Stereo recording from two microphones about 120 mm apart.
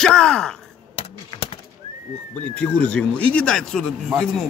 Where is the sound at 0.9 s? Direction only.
50° left (ahead or behind).